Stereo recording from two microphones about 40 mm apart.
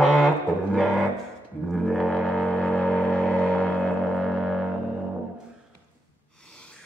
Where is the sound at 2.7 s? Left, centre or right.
Left.